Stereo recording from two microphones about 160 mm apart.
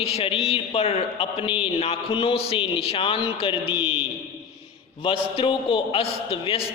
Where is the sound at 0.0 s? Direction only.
35° left (ahead or behind).